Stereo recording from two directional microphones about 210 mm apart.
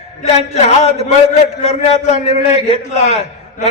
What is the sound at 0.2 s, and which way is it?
A man's voice, 30° left (ahead or behind).